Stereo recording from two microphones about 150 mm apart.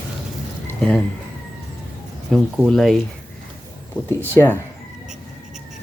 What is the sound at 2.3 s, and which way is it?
Speech, 5° left (ahead or behind).